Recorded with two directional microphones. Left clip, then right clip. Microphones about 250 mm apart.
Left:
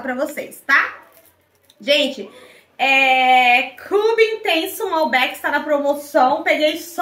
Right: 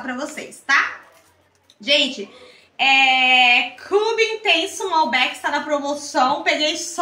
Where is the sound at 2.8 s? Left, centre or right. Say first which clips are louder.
Left 1 dB; right.